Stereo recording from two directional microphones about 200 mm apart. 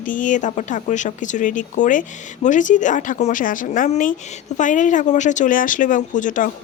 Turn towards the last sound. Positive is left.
turn(degrees=40)  # may be behind; listen again after turning